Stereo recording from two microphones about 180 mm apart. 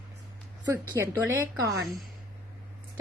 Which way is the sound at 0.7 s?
10° right (ahead or behind).